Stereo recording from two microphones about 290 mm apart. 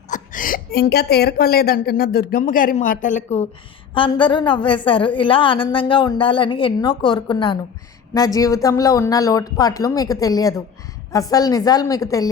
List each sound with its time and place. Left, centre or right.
0.1 s a woman's voice: left; by 12.3 s centre